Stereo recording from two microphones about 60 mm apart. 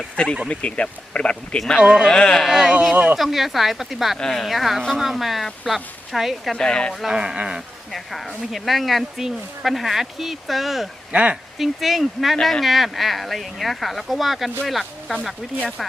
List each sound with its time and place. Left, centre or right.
0.4 s speech: left
1.8 s speech: centre
2.0 s speech: centre
2.4 s speech: centre
2.9 s speech: right
3.2 s speech: centre
4.2 s speech: centre
6.5 s speech: centre
7.1 s speech: centre
7.9 s speech: centre
11.1 s speech: centre
11.5 s speech: centre